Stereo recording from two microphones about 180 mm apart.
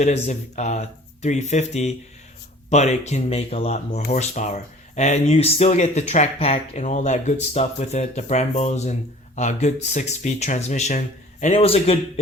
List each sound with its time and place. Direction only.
0.0 s speech: 40° left (ahead or behind)